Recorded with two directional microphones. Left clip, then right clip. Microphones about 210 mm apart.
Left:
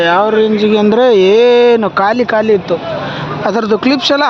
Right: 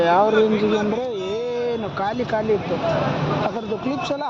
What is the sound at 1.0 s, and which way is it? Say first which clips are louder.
Speech: left 18 dB; 50° left (ahead or behind).